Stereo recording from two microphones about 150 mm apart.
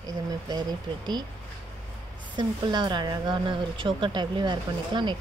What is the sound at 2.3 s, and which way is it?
Speech, 30° right (ahead or behind).